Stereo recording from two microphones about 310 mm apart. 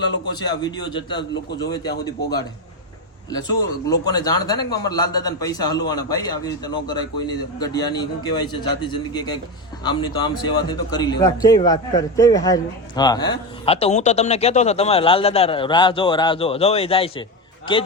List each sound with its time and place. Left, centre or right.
0.3 s a man's voice: centre
3.2 s a man's voice: centre